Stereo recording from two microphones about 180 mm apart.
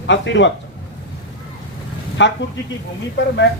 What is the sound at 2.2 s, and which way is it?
Speech, 80° left.